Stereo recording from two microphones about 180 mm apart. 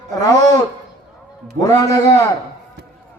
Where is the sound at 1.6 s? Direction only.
15° left (ahead or behind).